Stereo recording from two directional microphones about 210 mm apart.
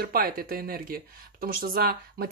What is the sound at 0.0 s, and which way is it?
Speech, 45° right (ahead or behind).